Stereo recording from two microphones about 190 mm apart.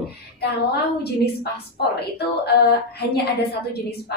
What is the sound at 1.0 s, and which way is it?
A woman's voice, 55° left (ahead or behind).